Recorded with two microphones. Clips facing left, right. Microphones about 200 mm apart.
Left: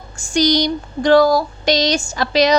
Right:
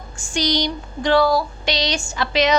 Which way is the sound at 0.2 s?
40° left (ahead or behind).